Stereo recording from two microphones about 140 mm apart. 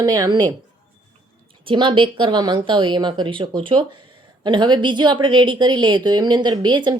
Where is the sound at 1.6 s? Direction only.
35° right (ahead or behind).